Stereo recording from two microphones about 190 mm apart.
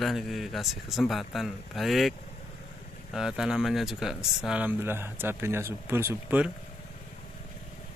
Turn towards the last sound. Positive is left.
turn(degrees=-10)  # may be behind; listen again after turning